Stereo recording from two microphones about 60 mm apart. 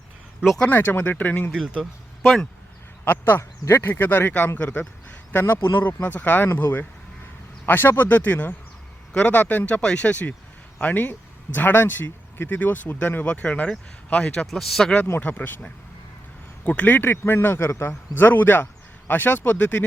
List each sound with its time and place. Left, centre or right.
0.7 s speech: left
1.8 s speech: centre
3.0 s speech: left
9.8 s speech: centre
14.4 s a man's voice: centre
15.2 s speech: left
16.6 s speech: left
18.2 s speech: left